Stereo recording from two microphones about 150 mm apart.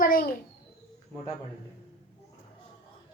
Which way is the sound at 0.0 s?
70° left (ahead or behind).